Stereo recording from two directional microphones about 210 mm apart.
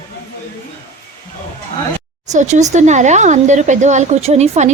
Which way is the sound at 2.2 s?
35° right (ahead or behind).